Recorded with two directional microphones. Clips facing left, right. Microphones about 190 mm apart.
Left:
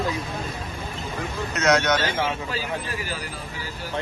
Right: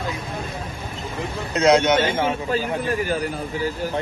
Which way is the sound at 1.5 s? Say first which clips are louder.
Right 5 dB; 30° right (ahead or behind).